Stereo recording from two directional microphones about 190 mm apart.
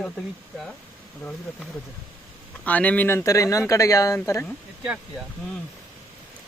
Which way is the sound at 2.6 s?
10° left (ahead or behind).